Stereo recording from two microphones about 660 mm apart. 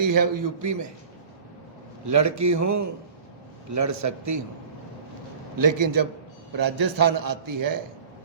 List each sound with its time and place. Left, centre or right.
0.1 s a man's voice: right
2.0 s a man's voice: right
5.5 s a man's voice: right